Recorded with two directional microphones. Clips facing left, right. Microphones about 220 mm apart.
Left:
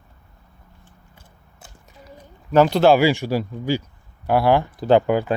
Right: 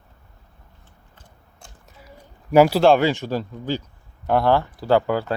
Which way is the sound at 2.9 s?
10° left (ahead or behind).